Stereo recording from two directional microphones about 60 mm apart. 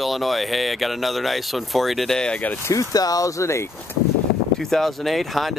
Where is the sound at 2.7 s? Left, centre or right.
Left.